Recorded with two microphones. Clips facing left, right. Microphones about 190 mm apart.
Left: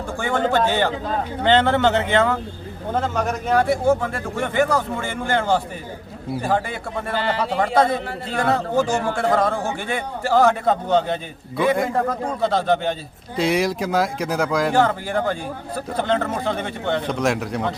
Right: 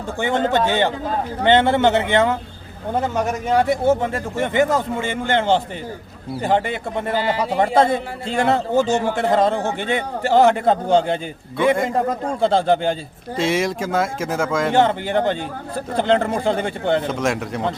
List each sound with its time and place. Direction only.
0.2 s a man's voice: 20° right (ahead or behind)
7.7 s speech: 25° right (ahead or behind)
11.5 s speech: centre (ahead or behind)
12.0 s speech: 30° right (ahead or behind)
13.3 s speech: centre (ahead or behind)
14.7 s a man's voice: 20° right (ahead or behind)
17.1 s speech: centre (ahead or behind)